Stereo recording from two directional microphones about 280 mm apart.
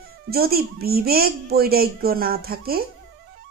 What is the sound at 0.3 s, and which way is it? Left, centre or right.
Speech, right.